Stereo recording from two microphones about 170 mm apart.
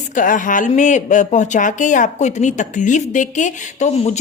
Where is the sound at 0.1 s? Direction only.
50° left (ahead or behind).